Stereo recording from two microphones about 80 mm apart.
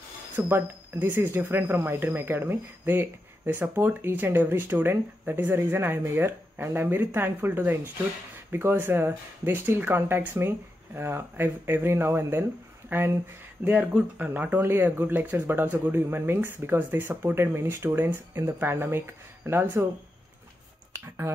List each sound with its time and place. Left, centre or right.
0.4 s speech: centre
0.9 s speech: right